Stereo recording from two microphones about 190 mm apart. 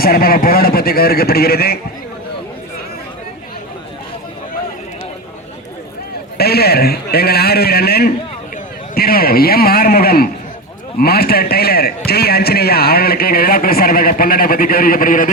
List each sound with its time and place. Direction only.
0.0 s a man's voice: 50° left (ahead or behind)
6.3 s a man's voice: 55° left (ahead or behind)